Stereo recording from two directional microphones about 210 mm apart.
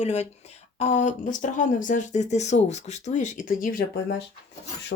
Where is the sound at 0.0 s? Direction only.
30° left (ahead or behind).